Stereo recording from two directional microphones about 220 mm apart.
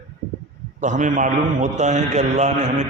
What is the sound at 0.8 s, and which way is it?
A man's voice, 35° right (ahead or behind).